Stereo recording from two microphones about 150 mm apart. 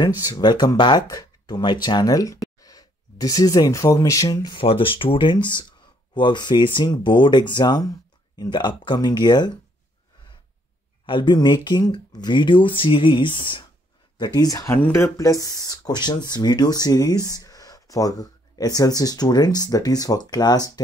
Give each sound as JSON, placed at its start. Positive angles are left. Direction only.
{"t": 0.2, "sound": "speech", "side_deg": 25}
{"t": 11.1, "sound": "speech", "side_deg": 30}